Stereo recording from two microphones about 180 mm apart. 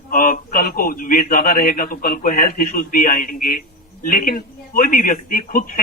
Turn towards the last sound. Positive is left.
turn(degrees=50)  # may be behind; listen again after turning